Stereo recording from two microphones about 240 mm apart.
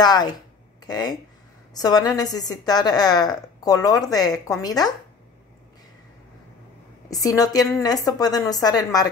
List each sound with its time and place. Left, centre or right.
0.0 s a woman's voice: centre
7.1 s a woman's voice: centre